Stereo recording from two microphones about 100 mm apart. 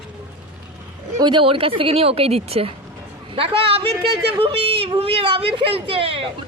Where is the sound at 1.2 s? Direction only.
50° right (ahead or behind); by 2.7 s 80° right.